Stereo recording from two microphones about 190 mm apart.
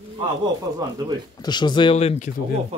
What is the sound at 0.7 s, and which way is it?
Speech, 20° right (ahead or behind).